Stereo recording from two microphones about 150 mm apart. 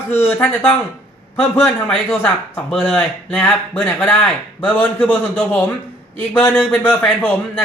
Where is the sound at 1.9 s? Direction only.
Centre (ahead or behind).